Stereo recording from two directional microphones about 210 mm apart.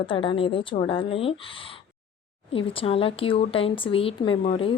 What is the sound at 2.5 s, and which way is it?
Speech, 25° left (ahead or behind).